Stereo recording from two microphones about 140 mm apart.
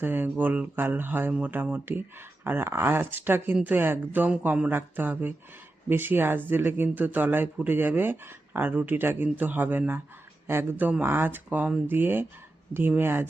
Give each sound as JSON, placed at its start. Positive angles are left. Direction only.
{"t": 0.0, "sound": "speech", "side_deg": -15}